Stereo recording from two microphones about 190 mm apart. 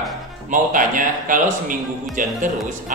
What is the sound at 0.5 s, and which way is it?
Speech, 45° right (ahead or behind).